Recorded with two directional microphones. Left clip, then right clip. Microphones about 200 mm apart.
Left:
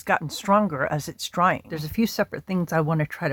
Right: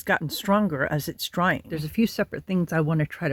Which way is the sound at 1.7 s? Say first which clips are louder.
Even; centre (ahead or behind).